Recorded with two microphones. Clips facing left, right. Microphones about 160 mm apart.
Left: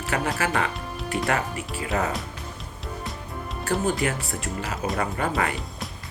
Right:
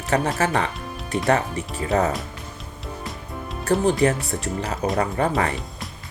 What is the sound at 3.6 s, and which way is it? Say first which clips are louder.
Speech: right 5 dB; 35° right (ahead or behind).